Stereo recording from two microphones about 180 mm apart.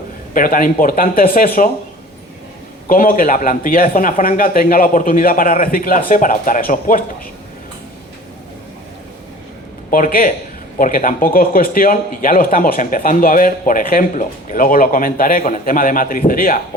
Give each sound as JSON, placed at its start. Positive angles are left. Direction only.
{"t": 0.3, "sound": "a man's voice", "side_deg": 50}
{"t": 2.8, "sound": "a man's voice", "side_deg": 50}
{"t": 9.9, "sound": "a man's voice", "side_deg": 50}